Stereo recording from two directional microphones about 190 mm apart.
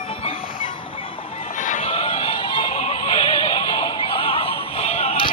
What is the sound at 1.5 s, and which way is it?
Music, 40° left (ahead or behind).